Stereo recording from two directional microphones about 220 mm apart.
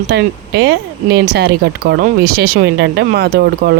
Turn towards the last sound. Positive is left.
turn(degrees=-45)  # may be behind; listen again after turning